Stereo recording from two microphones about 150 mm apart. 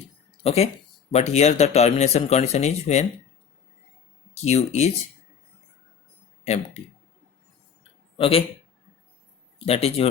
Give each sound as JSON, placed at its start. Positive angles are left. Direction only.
{"t": 0.4, "sound": "speech", "side_deg": 45}
{"t": 4.4, "sound": "speech", "side_deg": 45}
{"t": 6.4, "sound": "speech", "side_deg": 50}
{"t": 8.2, "sound": "speech", "side_deg": 40}
{"t": 9.6, "sound": "speech", "side_deg": 40}